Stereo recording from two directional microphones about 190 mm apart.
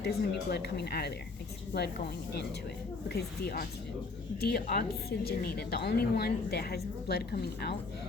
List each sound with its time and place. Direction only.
0.0 s a woman's voice: 60° left (ahead or behind)
3.1 s a woman's voice: 55° left (ahead or behind)